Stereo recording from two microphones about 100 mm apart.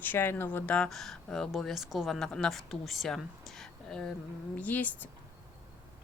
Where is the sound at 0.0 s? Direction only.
20° left (ahead or behind).